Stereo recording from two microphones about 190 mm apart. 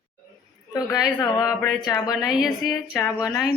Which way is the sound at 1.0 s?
20° left (ahead or behind).